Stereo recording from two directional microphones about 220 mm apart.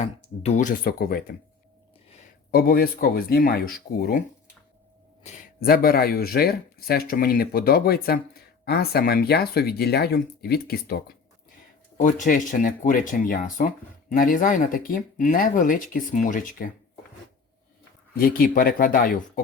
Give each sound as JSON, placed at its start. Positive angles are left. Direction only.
{"t": 0.0, "sound": "speech", "side_deg": 30}
{"t": 2.5, "sound": "speech", "side_deg": 45}
{"t": 5.2, "sound": "speech", "side_deg": 35}
{"t": 18.2, "sound": "speech", "side_deg": 40}